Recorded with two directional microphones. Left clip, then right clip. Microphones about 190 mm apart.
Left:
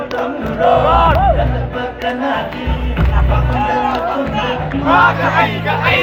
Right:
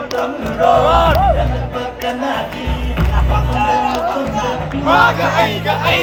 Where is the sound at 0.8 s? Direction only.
90° right.